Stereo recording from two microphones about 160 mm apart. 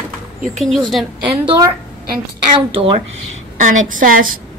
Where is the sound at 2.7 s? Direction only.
35° right (ahead or behind).